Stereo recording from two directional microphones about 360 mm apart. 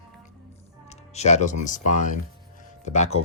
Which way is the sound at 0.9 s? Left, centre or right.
Centre.